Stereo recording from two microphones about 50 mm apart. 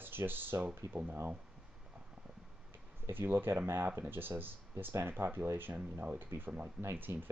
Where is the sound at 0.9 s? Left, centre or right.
Right.